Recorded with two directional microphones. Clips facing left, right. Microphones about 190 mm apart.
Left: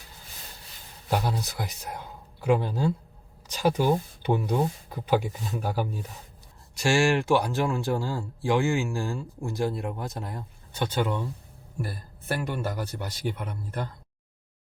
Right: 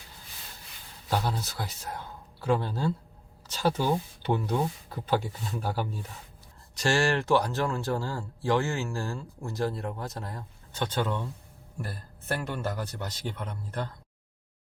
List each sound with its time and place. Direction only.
1.1 s speech: 15° left (ahead or behind)